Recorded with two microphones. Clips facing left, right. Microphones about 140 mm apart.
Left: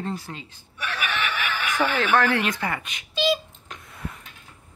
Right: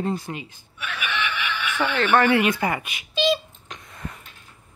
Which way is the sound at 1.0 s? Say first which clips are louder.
Right 1 dB; 45° left (ahead or behind).